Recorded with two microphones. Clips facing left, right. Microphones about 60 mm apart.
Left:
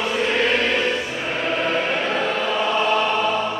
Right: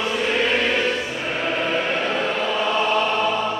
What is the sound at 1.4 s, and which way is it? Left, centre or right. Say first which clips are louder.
Choir: left 1 dB; centre.